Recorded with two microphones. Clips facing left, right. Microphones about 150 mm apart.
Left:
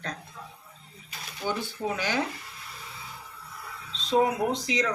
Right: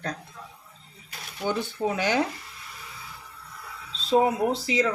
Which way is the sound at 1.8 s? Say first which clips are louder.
Right 4 dB; 45° right (ahead or behind).